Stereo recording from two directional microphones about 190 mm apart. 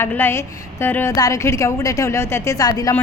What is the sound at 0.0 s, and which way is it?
A woman's voice, 10° left (ahead or behind).